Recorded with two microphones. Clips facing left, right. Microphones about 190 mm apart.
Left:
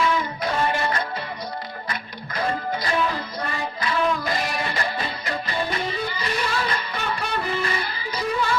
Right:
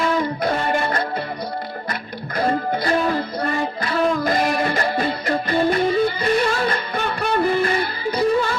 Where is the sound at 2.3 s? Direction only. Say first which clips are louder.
Right 5 dB; 45° right (ahead or behind).